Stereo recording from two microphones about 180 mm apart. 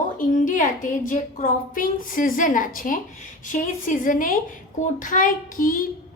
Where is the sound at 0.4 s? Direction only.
45° left (ahead or behind).